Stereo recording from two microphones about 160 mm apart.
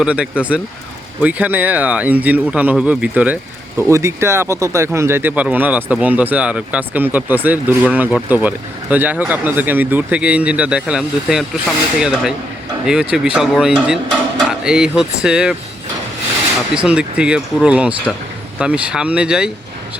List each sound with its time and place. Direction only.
0.0 s speech: 5° right (ahead or behind)
16.7 s speech: 5° right (ahead or behind)